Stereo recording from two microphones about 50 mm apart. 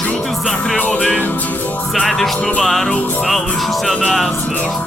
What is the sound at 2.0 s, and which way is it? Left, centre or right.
Music, centre.